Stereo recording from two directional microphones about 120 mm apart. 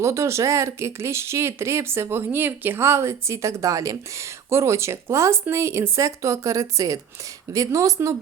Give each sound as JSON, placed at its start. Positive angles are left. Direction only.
{"t": 0.0, "sound": "speech", "side_deg": -25}